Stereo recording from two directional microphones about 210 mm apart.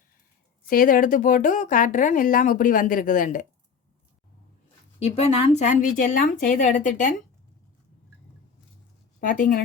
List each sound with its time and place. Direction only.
0.7 s speech: 40° left (ahead or behind)
4.9 s speech: 30° left (ahead or behind)
9.2 s speech: 40° left (ahead or behind)